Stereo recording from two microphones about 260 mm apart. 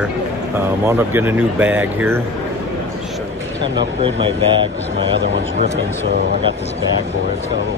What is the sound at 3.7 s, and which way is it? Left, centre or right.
Speech, centre.